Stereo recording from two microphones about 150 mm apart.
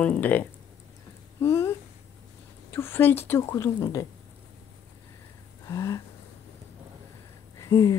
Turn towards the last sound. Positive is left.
turn(degrees=20)  # may be behind; listen again after turning